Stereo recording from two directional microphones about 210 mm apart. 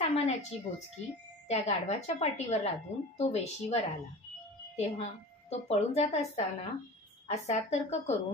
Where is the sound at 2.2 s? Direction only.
30° left (ahead or behind).